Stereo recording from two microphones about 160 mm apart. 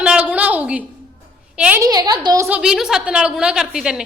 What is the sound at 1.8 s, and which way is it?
Speech, 25° right (ahead or behind).